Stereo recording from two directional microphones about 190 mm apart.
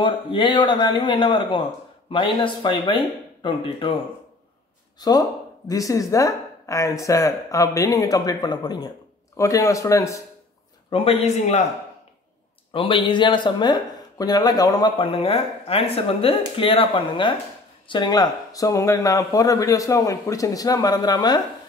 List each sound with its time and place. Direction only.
0.0 s speech: 25° left (ahead or behind)
5.0 s speech: 20° left (ahead or behind)
10.9 s a man's voice: 30° left (ahead or behind)
12.7 s speech: 25° left (ahead or behind)